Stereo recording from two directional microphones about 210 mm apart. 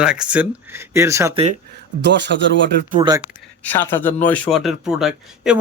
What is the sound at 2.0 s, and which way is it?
Speech, 55° right (ahead or behind).